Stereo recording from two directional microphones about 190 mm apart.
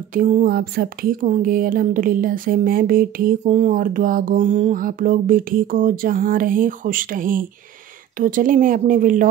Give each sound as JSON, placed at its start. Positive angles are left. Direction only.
{"t": 0.1, "sound": "speech", "side_deg": -45}
{"t": 3.4, "sound": "speech", "side_deg": -35}